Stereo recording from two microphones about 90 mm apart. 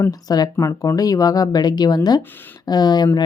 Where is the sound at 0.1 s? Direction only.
45° left (ahead or behind).